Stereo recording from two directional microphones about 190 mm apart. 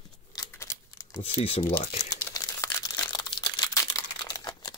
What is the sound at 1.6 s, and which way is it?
Speech, 10° left (ahead or behind).